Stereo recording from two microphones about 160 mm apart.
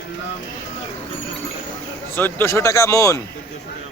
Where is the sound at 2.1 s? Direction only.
15° left (ahead or behind).